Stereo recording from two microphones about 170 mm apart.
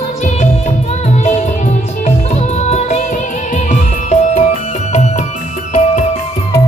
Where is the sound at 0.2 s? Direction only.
45° left (ahead or behind).